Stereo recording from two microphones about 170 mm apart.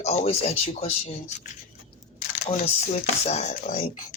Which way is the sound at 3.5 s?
55° left (ahead or behind).